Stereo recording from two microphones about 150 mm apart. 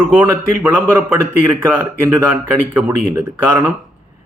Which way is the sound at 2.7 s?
15° right (ahead or behind).